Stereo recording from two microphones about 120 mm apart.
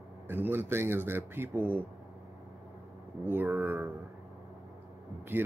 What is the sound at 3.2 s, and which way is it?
Speech, 20° right (ahead or behind).